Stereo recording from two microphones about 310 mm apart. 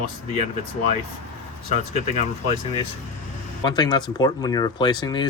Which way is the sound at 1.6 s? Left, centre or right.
Left.